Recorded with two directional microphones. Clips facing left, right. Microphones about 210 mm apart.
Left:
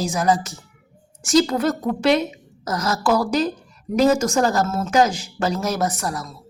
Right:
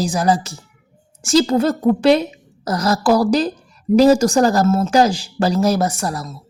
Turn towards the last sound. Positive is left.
turn(degrees=-30)  # may be behind; listen again after turning